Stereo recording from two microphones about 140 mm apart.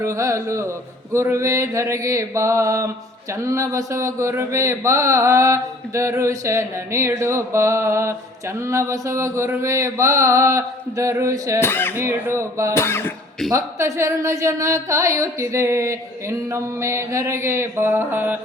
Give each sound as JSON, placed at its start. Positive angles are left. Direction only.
{"t": 0.0, "sound": "speech", "side_deg": -20}
{"t": 11.6, "sound": "throat clearing", "side_deg": 15}
{"t": 11.9, "sound": "speech", "side_deg": -20}
{"t": 12.7, "sound": "throat clearing", "side_deg": 20}
{"t": 13.5, "sound": "speech", "side_deg": -20}